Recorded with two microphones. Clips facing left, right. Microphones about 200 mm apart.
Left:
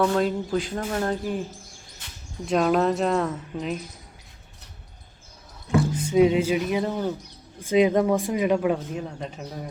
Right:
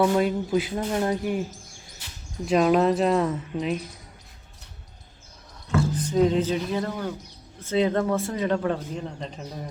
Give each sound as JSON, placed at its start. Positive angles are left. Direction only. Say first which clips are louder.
{"t": 0.0, "sound": "speech", "louder": "right 1 dB", "side_deg": -10}
{"t": 2.5, "sound": "a woman's voice", "louder": "right 1 dB", "side_deg": -5}
{"t": 5.6, "sound": "speech", "louder": "left 2 dB", "side_deg": 15}